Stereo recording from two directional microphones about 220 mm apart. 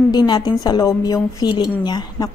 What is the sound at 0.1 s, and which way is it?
A woman's voice, 20° left (ahead or behind).